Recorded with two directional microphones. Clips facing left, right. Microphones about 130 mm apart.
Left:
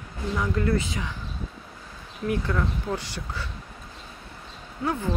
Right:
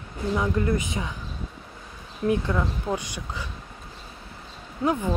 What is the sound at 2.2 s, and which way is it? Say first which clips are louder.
Speech: right 3 dB; 20° right (ahead or behind).